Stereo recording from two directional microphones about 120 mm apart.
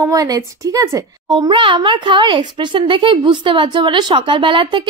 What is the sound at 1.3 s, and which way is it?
A child's voice, 45° right (ahead or behind).